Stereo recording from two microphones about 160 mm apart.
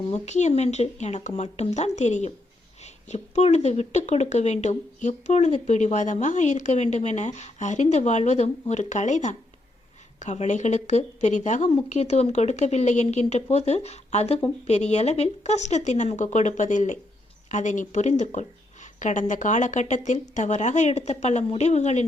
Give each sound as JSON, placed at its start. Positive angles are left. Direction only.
{"t": 0.1, "sound": "speech", "side_deg": 45}